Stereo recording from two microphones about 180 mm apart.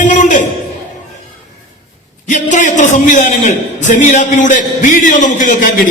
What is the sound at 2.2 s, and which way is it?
A man's voice, 40° left (ahead or behind).